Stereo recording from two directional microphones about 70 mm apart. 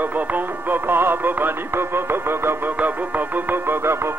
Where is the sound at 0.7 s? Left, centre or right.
Right.